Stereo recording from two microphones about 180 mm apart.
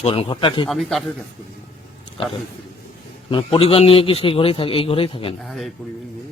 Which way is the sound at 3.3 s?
30° left (ahead or behind).